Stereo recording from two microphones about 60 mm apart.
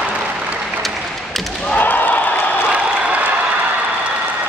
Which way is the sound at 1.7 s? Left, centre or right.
Left.